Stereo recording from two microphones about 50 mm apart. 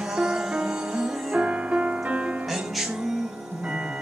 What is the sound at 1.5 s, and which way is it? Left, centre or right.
Music, right.